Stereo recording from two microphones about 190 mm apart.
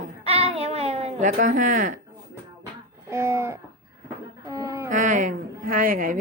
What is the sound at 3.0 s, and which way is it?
Speech, 15° right (ahead or behind).